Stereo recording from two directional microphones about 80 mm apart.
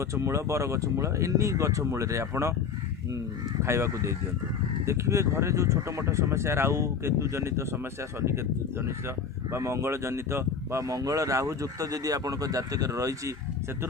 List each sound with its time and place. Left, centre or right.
0.1 s speech: right
3.6 s speech: right
9.5 s speech: right